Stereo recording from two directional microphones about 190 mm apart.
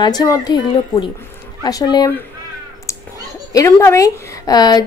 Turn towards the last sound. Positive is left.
turn(degrees=20)  # may be behind; listen again after turning